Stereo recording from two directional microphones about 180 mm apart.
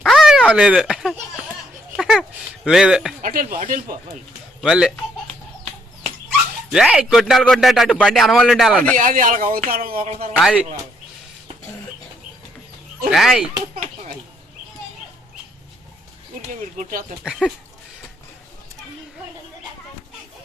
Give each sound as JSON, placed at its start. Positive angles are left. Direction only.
{"t": 0.0, "sound": "a sound", "side_deg": 0}
{"t": 2.6, "sound": "a man's voice", "side_deg": -5}
{"t": 3.2, "sound": "speech", "side_deg": -50}
{"t": 4.6, "sound": "a man's voice", "side_deg": -5}
{"t": 6.7, "sound": "a man's voice", "side_deg": 0}
{"t": 9.0, "sound": "speech", "side_deg": -45}
{"t": 10.3, "sound": "a man's voice", "side_deg": -5}
{"t": 13.1, "sound": "a man's voice", "side_deg": 0}
{"t": 16.6, "sound": "speech", "side_deg": -50}
{"t": 17.4, "sound": "a man's voice", "side_deg": 0}